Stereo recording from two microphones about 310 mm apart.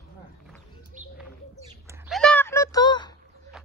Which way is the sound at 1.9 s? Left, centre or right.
Centre.